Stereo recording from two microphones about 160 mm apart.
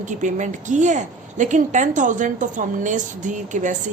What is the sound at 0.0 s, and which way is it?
A woman's voice, 50° right (ahead or behind).